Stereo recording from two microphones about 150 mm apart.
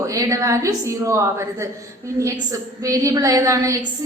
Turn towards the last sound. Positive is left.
turn(degrees=-20)  # may be behind; listen again after turning